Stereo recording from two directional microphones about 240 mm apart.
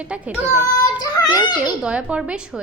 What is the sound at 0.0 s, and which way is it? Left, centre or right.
Speech, centre.